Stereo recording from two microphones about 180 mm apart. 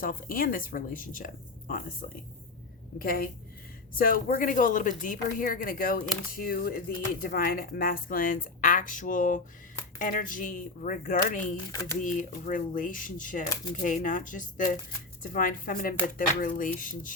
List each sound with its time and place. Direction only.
0.0 s a woman's voice: 55° left (ahead or behind)
11.7 s speech: 15° left (ahead or behind)
11.9 s a woman's voice: 45° left (ahead or behind)